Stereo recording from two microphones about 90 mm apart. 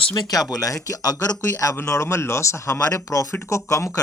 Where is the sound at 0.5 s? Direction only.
40° left (ahead or behind).